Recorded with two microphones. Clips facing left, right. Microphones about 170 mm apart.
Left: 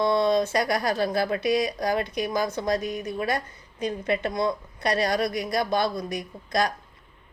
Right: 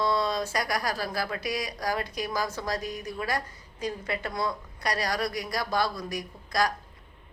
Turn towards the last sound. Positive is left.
turn(degrees=25)  # may be behind; listen again after turning